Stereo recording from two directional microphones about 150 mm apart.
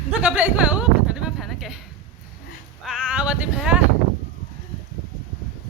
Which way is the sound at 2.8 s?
5° right (ahead or behind).